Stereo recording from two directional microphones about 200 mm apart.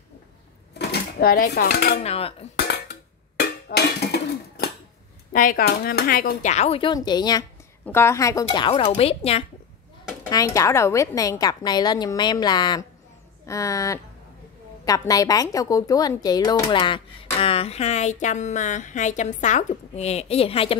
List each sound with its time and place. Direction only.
0.7 s speech: 50° left (ahead or behind)
2.0 s speech: 30° left (ahead or behind)
2.7 s a sound: 55° left (ahead or behind)
5.3 s a woman's voice: 40° left (ahead or behind)
10.3 s a woman's voice: 15° left (ahead or behind)